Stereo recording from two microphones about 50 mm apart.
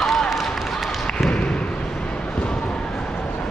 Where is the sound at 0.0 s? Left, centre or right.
Centre.